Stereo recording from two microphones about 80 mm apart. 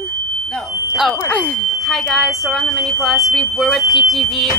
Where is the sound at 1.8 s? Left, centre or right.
Centre.